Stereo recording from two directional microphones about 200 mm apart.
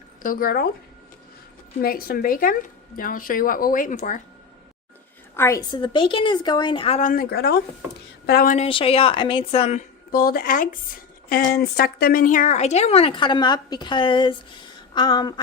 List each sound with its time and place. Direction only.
0.2 s speech: 45° left (ahead or behind)
1.8 s speech: 50° left (ahead or behind)
5.4 s a woman's voice: 15° left (ahead or behind); by 8.5 s 50° left (ahead or behind)
8.5 s a woman's voice: 30° left (ahead or behind)
10.1 s a woman's voice: 45° left (ahead or behind); by 15.4 s 20° left (ahead or behind)